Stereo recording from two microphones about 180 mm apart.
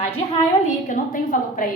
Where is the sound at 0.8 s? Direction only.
45° left (ahead or behind).